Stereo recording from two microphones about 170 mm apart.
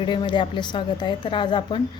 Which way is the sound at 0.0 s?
25° left (ahead or behind).